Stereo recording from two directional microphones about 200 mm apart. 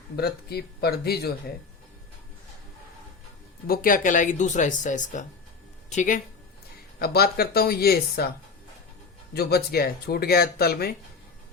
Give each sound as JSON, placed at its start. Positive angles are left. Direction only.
{"t": 0.2, "sound": "speech", "side_deg": 50}
{"t": 3.7, "sound": "speech", "side_deg": 45}
{"t": 7.0, "sound": "speech", "side_deg": 50}
{"t": 9.3, "sound": "speech", "side_deg": 50}